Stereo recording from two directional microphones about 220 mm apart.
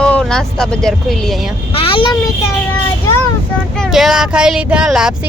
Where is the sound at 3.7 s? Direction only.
Centre (ahead or behind).